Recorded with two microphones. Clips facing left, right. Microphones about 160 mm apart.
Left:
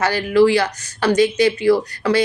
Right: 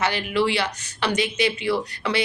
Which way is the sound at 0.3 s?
40° left (ahead or behind).